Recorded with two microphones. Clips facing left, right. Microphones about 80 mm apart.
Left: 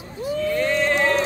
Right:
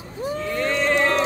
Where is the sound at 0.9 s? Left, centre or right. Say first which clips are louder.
Even; centre.